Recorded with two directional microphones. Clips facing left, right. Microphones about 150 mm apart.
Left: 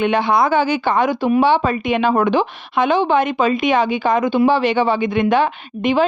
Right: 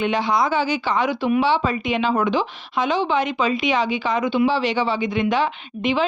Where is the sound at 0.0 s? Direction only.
60° left (ahead or behind).